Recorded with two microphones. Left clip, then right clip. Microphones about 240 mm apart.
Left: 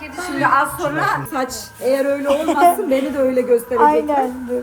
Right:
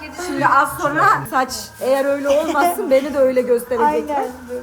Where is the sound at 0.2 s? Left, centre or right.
Centre.